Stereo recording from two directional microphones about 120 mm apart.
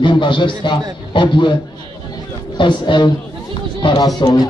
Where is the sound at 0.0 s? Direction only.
40° left (ahead or behind).